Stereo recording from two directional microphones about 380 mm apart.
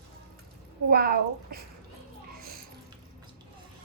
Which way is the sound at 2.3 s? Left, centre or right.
Right.